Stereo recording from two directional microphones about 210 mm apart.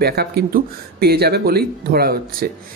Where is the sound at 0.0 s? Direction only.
50° right (ahead or behind).